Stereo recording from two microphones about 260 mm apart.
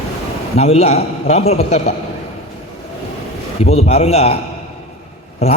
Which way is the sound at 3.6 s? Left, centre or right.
Left.